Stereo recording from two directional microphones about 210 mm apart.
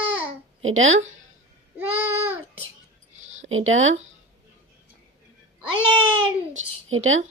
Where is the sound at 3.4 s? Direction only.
70° right (ahead or behind).